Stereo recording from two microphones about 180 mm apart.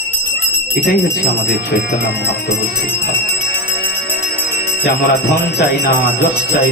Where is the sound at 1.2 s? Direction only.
60° left (ahead or behind).